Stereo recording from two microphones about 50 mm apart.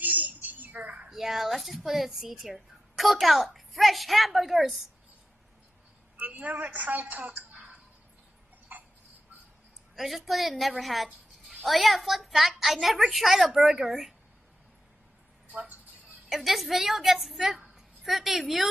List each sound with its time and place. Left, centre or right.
0.0 s a sound: right
1.0 s speech: centre
6.1 s a woman's voice: right
9.9 s a woman's voice: centre
15.5 s speech: right
16.3 s speech: centre